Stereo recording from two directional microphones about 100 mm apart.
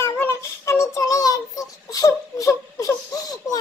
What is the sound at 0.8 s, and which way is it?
Crying, 35° left (ahead or behind).